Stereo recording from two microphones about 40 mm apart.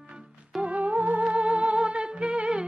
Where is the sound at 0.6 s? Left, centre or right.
Right.